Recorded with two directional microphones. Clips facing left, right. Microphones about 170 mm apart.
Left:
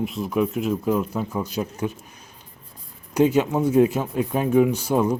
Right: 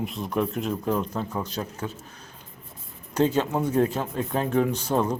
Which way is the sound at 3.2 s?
10° left (ahead or behind).